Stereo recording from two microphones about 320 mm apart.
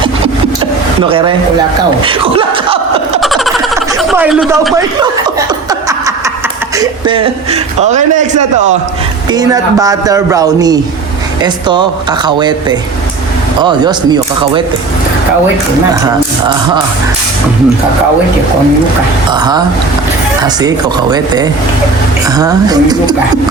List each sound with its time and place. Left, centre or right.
1.0 s speech: centre
2.0 s a sound: centre
3.2 s a sound: centre
5.9 s snicker: centre
6.7 s a man's voice: centre
9.3 s speech: centre
19.3 s speech: centre